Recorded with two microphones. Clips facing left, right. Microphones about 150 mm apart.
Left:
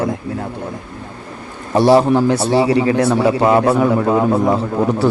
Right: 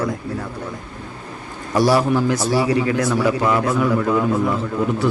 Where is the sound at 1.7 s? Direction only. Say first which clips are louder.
Left 5 dB; 25° left (ahead or behind).